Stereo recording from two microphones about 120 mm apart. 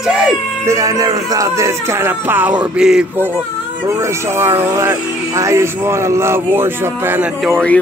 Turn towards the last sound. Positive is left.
turn(degrees=5)  # may be behind; listen again after turning